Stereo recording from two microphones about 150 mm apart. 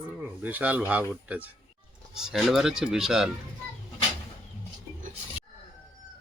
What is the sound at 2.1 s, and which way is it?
Speech, 5° right (ahead or behind).